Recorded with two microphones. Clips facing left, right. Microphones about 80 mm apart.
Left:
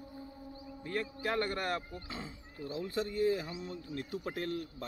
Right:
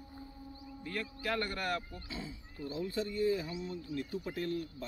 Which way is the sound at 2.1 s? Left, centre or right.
Left.